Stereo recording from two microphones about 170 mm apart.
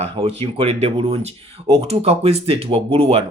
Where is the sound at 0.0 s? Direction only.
35° right (ahead or behind).